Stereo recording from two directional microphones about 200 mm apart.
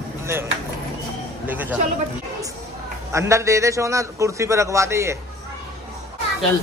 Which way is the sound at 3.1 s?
15° right (ahead or behind).